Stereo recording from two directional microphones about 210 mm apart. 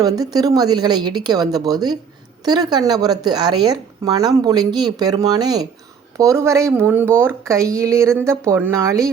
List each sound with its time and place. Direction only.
0.0 s speech: 20° right (ahead or behind)